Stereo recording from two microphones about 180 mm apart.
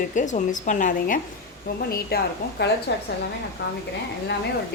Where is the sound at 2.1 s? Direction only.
55° left (ahead or behind).